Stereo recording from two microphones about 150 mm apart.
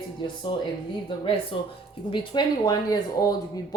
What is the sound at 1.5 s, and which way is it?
Speech, 35° left (ahead or behind).